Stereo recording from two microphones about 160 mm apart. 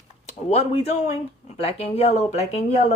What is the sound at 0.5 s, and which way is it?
Speech, 40° left (ahead or behind).